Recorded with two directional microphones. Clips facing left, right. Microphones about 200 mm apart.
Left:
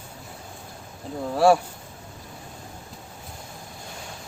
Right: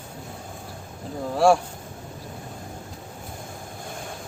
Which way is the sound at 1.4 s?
Centre (ahead or behind).